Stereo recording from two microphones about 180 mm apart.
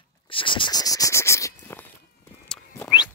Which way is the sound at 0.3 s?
30° left (ahead or behind).